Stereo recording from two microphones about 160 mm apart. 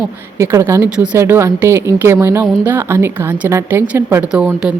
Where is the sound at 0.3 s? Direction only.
15° right (ahead or behind).